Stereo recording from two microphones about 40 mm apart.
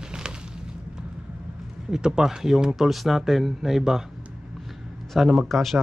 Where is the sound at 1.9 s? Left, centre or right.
Centre.